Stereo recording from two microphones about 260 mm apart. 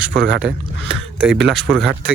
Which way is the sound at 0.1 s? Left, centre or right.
Right.